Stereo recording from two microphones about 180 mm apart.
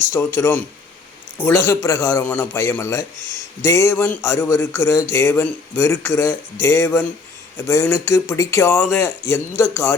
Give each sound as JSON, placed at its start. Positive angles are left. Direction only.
{"t": 0.3, "sound": "a man's voice", "side_deg": 15}